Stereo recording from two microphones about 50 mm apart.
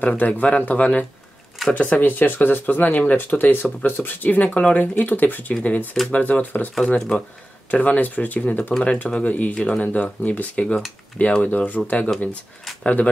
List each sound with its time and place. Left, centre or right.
0.0 s speech: left
4.9 s speech: left
7.7 s speech: left